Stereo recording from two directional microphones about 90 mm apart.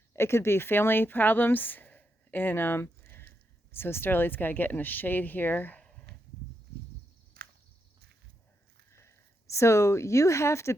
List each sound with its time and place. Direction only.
0.1 s speech: 30° left (ahead or behind)
8.9 s speech: 30° left (ahead or behind)